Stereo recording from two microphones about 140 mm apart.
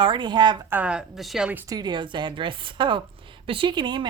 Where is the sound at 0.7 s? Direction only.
10° right (ahead or behind).